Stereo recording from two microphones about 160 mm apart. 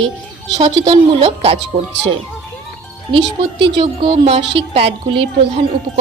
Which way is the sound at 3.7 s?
35° right (ahead or behind).